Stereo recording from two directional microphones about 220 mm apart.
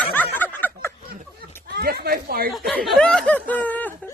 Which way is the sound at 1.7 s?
45° right (ahead or behind).